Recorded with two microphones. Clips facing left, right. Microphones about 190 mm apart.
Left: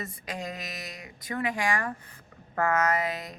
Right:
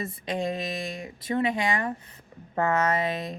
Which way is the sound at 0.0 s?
25° right (ahead or behind).